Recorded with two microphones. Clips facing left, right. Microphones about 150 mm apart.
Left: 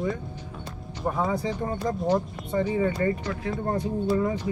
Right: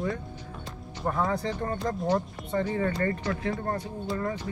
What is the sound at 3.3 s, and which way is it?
Speech, centre (ahead or behind).